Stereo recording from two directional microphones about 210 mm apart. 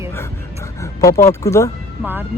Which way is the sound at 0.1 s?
15° left (ahead or behind).